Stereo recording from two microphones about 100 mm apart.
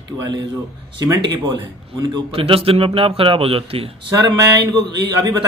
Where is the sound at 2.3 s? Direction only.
70° right (ahead or behind).